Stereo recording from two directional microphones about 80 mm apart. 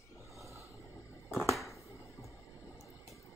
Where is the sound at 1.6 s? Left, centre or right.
Left.